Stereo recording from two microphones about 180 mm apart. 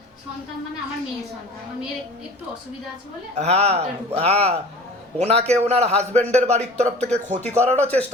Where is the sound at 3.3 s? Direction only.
35° right (ahead or behind).